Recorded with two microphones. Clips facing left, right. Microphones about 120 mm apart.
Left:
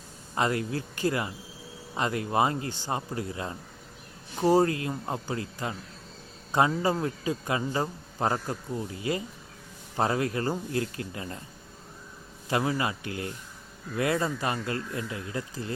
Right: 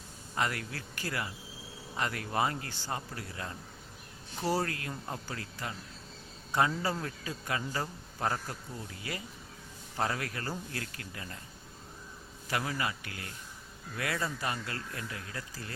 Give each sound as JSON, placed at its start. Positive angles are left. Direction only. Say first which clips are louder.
{"t": 0.3, "sound": "a man's voice", "louder": "left 7 dB", "side_deg": 25}
{"t": 12.5, "sound": "a man's voice", "louder": "left 7 dB", "side_deg": 25}